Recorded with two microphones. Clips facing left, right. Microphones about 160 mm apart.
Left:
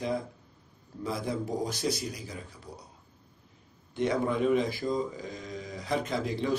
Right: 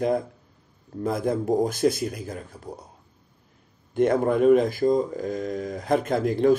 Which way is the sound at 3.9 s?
50° right (ahead or behind).